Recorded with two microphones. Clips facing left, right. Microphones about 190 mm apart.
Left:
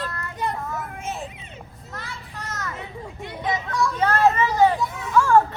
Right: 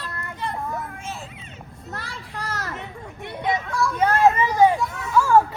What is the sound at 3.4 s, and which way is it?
Children playing, centre (ahead or behind).